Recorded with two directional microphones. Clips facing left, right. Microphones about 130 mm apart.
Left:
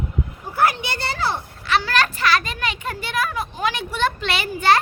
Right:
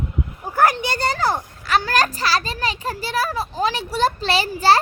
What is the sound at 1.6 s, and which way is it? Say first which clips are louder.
A child's voice: right 1 dB; 40° right (ahead or behind).